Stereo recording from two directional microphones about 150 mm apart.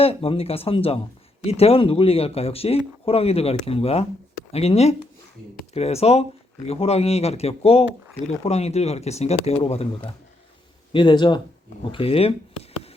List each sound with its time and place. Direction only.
0.0 s a man's voice: 40° left (ahead or behind)